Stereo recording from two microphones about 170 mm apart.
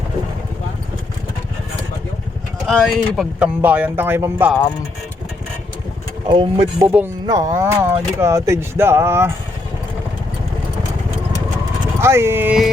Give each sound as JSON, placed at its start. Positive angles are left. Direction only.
{"t": 2.6, "sound": "speech", "side_deg": 0}
{"t": 6.2, "sound": "speech", "side_deg": -30}
{"t": 6.8, "sound": "speech", "side_deg": -10}
{"t": 11.9, "sound": "speech", "side_deg": -15}